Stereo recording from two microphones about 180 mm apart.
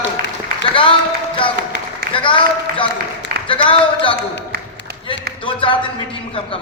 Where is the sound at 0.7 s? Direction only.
30° left (ahead or behind).